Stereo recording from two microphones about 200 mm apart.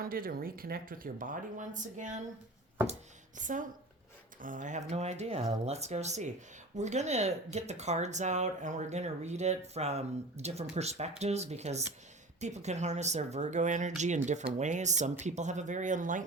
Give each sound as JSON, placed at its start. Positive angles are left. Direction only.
{"t": 0.0, "sound": "speech", "side_deg": -45}
{"t": 3.3, "sound": "speech", "side_deg": -40}